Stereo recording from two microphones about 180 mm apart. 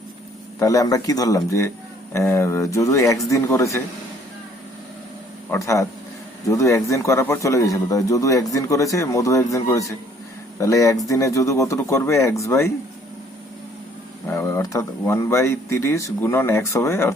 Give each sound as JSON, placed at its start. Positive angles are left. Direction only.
{"t": 0.6, "sound": "speech", "side_deg": 20}
{"t": 5.5, "sound": "speech", "side_deg": 15}
{"t": 14.3, "sound": "speech", "side_deg": 15}